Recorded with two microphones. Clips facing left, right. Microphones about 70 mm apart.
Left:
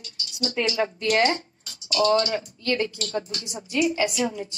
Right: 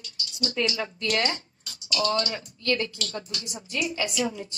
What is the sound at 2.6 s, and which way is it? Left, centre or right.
Speech, left.